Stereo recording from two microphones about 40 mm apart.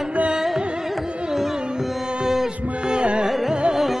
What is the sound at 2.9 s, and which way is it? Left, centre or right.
Music, right.